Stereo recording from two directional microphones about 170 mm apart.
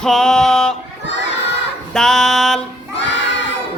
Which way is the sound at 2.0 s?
5° left (ahead or behind).